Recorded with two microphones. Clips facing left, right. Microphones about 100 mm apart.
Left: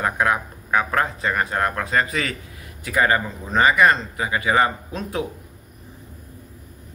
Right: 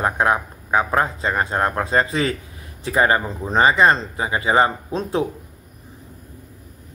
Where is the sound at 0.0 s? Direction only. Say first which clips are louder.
Right 2 dB; 25° right (ahead or behind).